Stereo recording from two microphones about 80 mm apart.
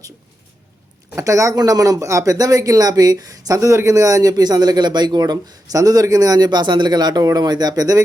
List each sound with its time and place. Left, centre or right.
1.1 s speech: right